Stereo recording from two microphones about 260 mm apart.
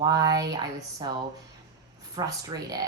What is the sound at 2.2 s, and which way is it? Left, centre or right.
Speech, centre.